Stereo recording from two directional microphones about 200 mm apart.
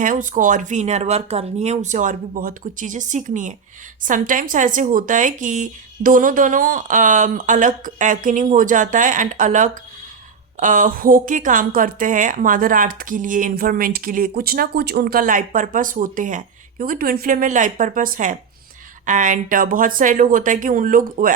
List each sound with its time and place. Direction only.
0.0 s a woman's voice: 40° right (ahead or behind)